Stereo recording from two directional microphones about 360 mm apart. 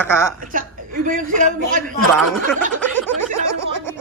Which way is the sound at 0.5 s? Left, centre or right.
Right.